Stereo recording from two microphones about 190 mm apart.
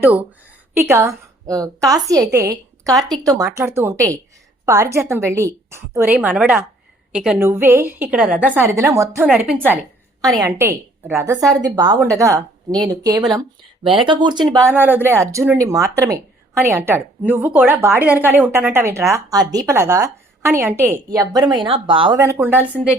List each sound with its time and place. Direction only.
0.0 s a woman's voice: 10° right (ahead or behind); by 22.1 s 25° right (ahead or behind)
22.1 s a woman's voice: 15° right (ahead or behind)